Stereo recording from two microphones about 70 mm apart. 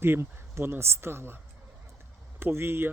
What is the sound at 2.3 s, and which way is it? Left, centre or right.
Speech, right.